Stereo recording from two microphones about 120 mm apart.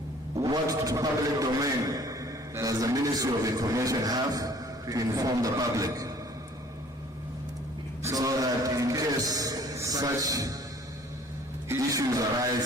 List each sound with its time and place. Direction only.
0.3 s music: 30° right (ahead or behind)
1.9 s a man's voice: 30° right (ahead or behind)
8.0 s music: 30° right (ahead or behind)
11.7 s music: 25° right (ahead or behind)